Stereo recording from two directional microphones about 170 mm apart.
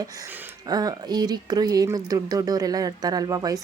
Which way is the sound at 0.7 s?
25° right (ahead or behind).